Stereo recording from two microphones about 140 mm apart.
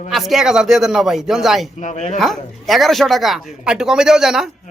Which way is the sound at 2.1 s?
Centre (ahead or behind).